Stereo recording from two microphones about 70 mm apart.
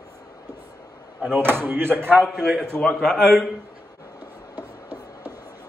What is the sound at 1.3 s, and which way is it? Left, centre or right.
Speech, right.